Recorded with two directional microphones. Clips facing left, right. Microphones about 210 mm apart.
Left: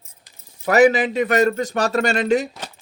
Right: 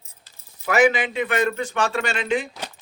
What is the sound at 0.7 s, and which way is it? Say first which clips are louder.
Speech: left 4 dB; 40° left (ahead or behind).